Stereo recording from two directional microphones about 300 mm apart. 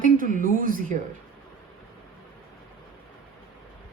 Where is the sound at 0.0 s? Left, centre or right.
Right.